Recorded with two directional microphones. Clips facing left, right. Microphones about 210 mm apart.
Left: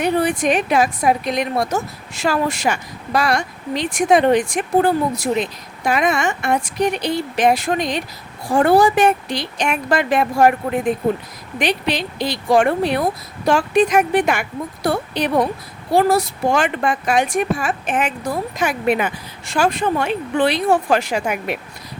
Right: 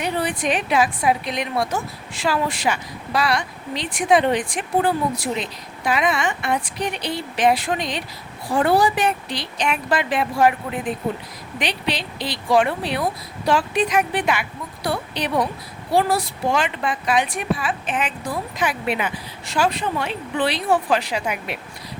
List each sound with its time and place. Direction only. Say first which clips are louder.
0.0 s a woman's voice: left 6 dB; 45° left (ahead or behind)